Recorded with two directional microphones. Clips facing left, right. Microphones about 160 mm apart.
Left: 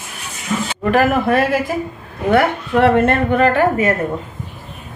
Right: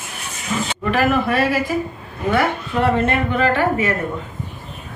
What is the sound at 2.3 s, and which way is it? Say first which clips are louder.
Speech: left 5 dB; 60° left (ahead or behind).